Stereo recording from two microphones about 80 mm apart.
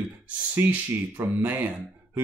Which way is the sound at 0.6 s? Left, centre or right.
Right.